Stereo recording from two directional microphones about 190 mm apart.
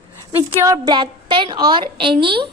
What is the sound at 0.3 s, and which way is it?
A woman's voice, 20° right (ahead or behind).